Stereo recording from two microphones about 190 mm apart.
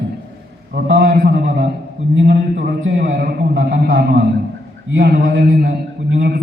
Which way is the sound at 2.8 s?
60° right (ahead or behind).